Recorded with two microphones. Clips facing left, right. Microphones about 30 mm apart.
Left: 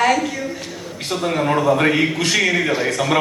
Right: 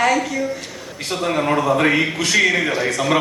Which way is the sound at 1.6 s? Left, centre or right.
Centre.